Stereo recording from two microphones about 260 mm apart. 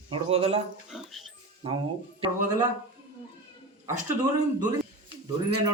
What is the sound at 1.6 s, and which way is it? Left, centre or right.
Speech, right.